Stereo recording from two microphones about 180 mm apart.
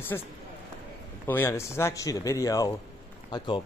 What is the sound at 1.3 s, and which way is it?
A man's voice, 15° left (ahead or behind).